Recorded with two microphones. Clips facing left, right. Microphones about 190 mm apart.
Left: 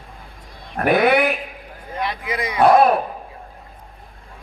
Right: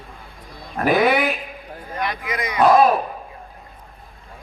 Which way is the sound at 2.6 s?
65° left (ahead or behind).